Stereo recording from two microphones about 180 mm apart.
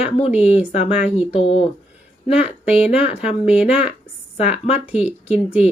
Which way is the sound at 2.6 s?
5° right (ahead or behind).